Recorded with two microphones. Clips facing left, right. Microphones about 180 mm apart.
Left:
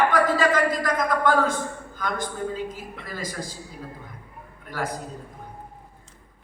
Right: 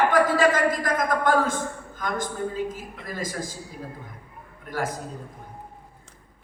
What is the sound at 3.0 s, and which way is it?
Speech, 45° right (ahead or behind).